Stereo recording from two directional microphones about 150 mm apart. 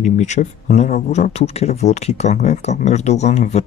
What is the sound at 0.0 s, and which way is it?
Speech, 50° left (ahead or behind).